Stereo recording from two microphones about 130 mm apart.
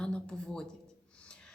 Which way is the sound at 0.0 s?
5° left (ahead or behind).